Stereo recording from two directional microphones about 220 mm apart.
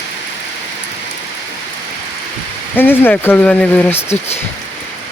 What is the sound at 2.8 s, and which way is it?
Speech, 10° left (ahead or behind).